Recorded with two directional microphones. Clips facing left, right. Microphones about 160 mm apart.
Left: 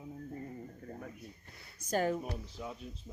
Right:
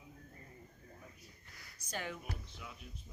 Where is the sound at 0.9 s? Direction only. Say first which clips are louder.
Left 11 dB; 65° left (ahead or behind).